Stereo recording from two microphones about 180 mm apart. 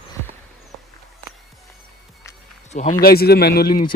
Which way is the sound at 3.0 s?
60° left (ahead or behind).